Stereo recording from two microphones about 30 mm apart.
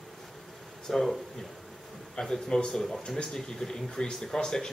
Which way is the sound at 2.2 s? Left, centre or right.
Left.